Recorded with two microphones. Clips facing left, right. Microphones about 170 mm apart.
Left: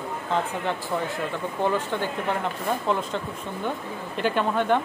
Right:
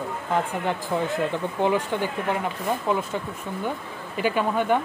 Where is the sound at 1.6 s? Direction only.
15° right (ahead or behind).